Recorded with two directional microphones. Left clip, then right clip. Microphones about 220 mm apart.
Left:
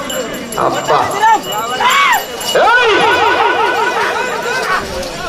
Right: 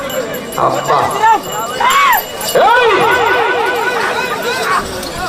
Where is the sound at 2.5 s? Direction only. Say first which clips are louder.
Even; 55° left (ahead or behind).